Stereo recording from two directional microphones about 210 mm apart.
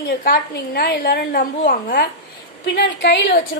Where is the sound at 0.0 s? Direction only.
45° left (ahead or behind).